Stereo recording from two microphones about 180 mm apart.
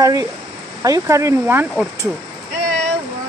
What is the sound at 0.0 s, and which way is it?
Speech, 20° right (ahead or behind).